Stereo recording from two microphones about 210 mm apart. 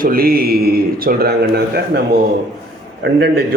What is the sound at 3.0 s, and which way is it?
Speech, 50° right (ahead or behind).